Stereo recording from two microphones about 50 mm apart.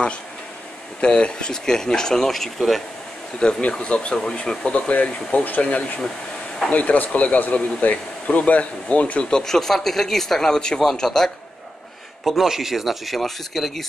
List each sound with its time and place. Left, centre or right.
1.0 s speech: left; by 2.8 s centre
3.4 s speech: centre
9.3 s speech: centre
10.8 s speech: centre
12.3 s speech: centre